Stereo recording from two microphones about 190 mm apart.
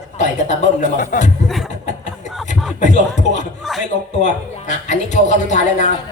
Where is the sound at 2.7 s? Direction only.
40° left (ahead or behind).